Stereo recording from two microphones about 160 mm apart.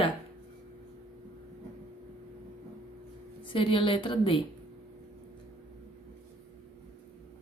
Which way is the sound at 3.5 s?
35° left (ahead or behind).